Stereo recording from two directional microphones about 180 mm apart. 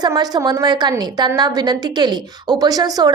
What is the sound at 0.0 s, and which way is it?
A woman's voice, 20° right (ahead or behind).